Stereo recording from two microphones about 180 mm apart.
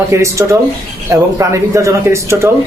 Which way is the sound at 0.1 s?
15° right (ahead or behind).